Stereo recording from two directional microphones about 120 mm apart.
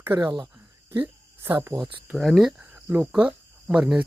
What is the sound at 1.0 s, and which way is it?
Speech, 15° right (ahead or behind).